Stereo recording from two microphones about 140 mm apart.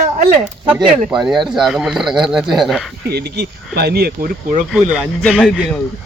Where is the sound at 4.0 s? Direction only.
90° right.